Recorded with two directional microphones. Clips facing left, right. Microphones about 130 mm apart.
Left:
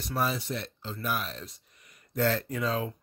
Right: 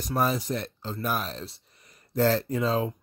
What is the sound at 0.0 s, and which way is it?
Speech, 45° right (ahead or behind).